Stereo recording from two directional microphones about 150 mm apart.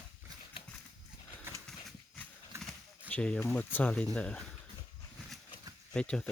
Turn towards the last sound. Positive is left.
turn(degrees=5)  # may be behind; listen again after turning